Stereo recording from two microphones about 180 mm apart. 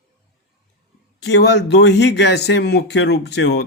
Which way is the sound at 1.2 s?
70° left (ahead or behind).